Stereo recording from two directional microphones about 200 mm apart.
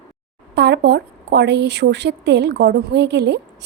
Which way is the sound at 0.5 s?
55° right (ahead or behind).